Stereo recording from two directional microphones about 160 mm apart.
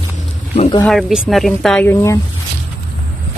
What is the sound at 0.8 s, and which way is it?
Speech, centre (ahead or behind).